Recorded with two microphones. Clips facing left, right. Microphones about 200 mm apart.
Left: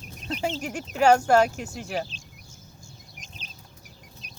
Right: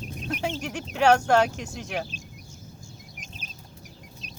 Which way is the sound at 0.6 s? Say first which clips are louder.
Left 1 dB; 5° left (ahead or behind).